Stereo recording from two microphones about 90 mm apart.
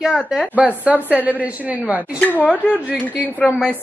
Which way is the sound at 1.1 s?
20° right (ahead or behind).